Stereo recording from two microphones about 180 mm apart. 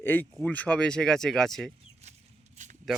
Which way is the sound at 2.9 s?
Centre (ahead or behind).